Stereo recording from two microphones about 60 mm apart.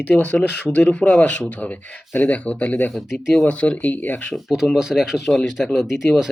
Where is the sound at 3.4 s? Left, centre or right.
Left.